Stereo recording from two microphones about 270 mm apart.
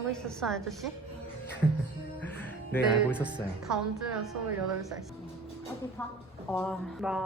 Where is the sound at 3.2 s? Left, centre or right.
Centre.